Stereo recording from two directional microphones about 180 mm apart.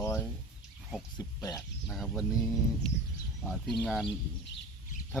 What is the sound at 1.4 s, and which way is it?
Speech, 20° left (ahead or behind).